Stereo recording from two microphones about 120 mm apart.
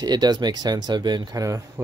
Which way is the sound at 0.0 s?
35° right (ahead or behind).